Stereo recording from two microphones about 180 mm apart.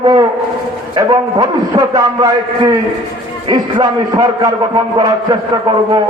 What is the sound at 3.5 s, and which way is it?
A man's voice, 20° right (ahead or behind).